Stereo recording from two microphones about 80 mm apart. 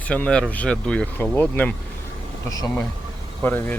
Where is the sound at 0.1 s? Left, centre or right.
Centre.